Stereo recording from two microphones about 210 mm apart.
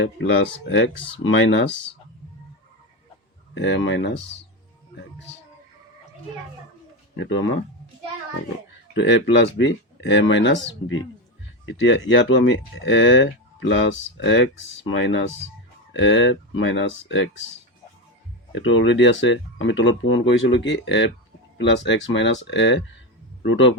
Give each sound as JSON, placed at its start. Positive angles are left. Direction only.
{"t": 0.0, "sound": "speech", "side_deg": 65}
{"t": 3.5, "sound": "speech", "side_deg": 60}
{"t": 7.2, "sound": "speech", "side_deg": 60}
{"t": 9.0, "sound": "speech", "side_deg": 60}
{"t": 18.5, "sound": "speech", "side_deg": 60}